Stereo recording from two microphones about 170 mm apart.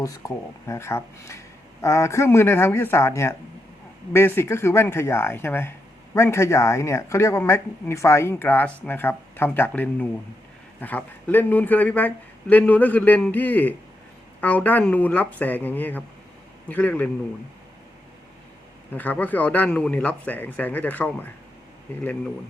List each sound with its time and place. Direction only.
0.7 s speech: 15° left (ahead or behind)
18.9 s speech: 10° left (ahead or behind)